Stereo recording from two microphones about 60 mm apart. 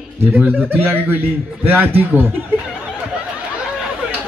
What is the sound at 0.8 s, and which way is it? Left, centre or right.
A man's voice, right.